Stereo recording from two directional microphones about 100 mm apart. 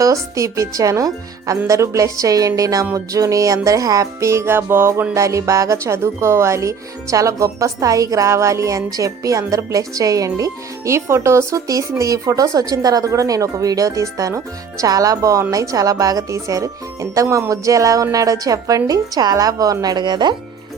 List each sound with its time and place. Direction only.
0.0 s speech: 30° right (ahead or behind)